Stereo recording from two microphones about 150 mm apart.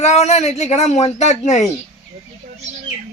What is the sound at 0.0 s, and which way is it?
Speech, 50° left (ahead or behind).